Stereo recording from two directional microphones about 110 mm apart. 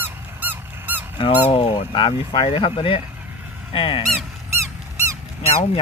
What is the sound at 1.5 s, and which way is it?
Speech, 50° left (ahead or behind).